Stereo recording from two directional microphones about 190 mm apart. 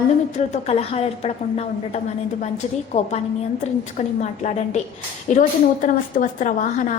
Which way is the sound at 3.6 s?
40° left (ahead or behind).